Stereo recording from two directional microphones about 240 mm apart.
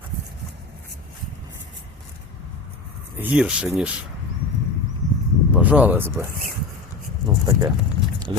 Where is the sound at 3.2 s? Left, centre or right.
Centre.